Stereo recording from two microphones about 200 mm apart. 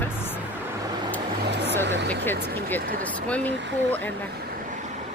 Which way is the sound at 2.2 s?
10° left (ahead or behind).